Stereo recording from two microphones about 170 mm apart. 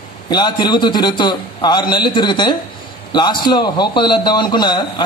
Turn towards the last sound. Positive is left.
turn(degrees=25)  # may be behind; listen again after turning